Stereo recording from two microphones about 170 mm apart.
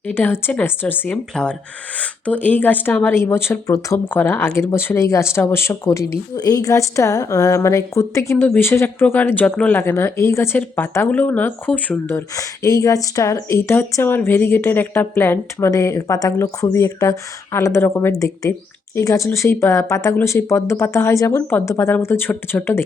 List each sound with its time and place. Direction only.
0.1 s speech: 10° left (ahead or behind)